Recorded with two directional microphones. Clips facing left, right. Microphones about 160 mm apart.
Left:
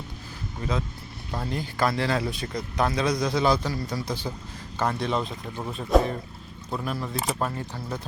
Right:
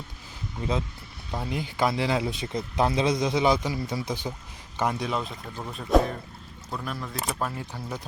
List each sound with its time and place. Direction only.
0.6 s speech: 20° right (ahead or behind)
1.3 s a man's voice: 10° right (ahead or behind)